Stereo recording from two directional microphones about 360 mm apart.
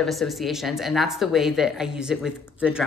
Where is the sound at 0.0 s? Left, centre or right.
Centre.